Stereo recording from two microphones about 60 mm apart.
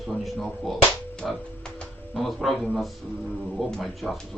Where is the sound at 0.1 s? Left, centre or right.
Centre.